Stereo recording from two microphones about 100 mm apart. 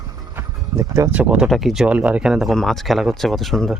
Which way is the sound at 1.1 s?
10° right (ahead or behind).